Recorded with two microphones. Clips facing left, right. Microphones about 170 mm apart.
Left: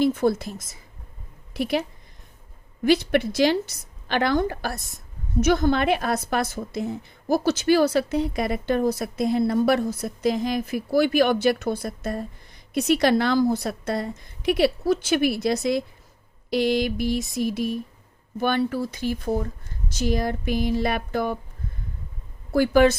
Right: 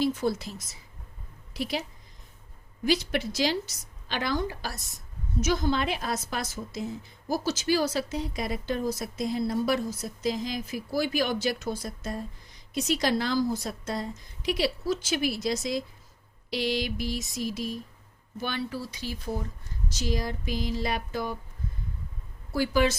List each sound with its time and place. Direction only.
0.0 s a woman's voice: 55° left (ahead or behind)
2.8 s a woman's voice: 60° left (ahead or behind)
22.5 s a woman's voice: 55° left (ahead or behind)